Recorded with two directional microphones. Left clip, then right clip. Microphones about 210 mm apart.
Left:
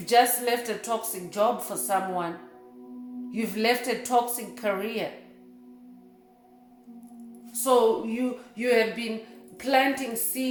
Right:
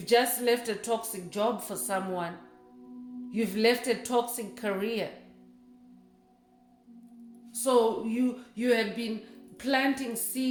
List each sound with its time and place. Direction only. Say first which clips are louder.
0.0 s speech: left 3 dB; 30° right (ahead or behind)
3.2 s speech: even; 30° right (ahead or behind)
7.7 s speech: left 3 dB; 30° right (ahead or behind)